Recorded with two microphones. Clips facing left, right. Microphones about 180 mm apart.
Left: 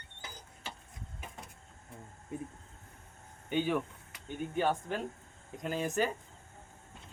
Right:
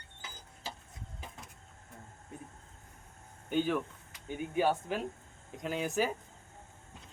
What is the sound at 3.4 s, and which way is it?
Speech, 5° left (ahead or behind).